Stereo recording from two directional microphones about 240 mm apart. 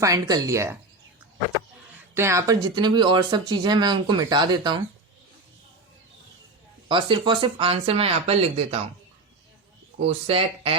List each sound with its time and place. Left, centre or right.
0.0 s speech: centre
2.1 s speech: centre
6.8 s speech: centre
10.0 s speech: right